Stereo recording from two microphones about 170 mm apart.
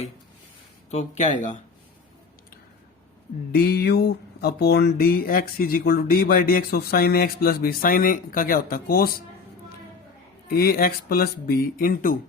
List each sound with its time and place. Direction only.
0.9 s speech: 40° left (ahead or behind)
3.5 s speech: 65° left (ahead or behind)
10.5 s speech: 60° left (ahead or behind)